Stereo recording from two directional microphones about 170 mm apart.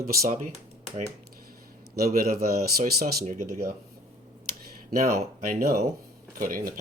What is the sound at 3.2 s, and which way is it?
Speech, 45° right (ahead or behind).